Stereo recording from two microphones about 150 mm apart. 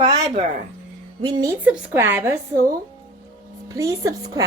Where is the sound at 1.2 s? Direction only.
25° right (ahead or behind).